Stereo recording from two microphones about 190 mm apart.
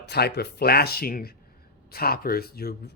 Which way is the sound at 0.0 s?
60° left (ahead or behind).